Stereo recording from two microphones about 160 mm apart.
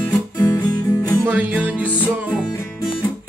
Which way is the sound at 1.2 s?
10° right (ahead or behind).